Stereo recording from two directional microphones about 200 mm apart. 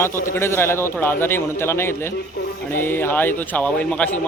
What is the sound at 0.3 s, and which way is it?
A man's voice, 10° left (ahead or behind).